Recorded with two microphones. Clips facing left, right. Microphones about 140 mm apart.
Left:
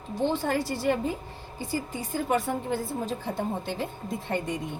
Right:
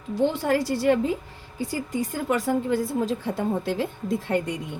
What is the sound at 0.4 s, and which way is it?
Speech, 85° right.